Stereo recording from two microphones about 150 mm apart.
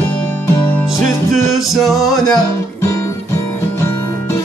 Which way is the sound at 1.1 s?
Centre (ahead or behind).